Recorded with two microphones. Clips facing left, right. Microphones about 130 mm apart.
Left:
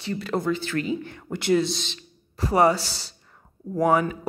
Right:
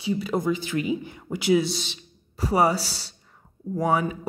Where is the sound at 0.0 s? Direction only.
10° right (ahead or behind).